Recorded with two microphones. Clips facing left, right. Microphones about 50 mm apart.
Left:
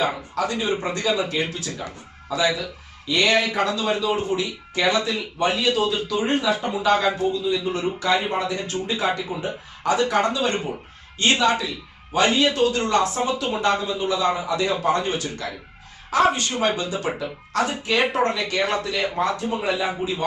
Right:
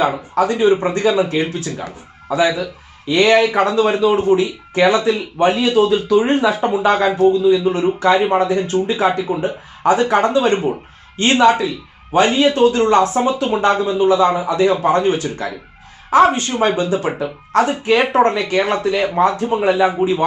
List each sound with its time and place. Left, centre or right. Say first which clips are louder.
0.0 s speech: right 7 dB; right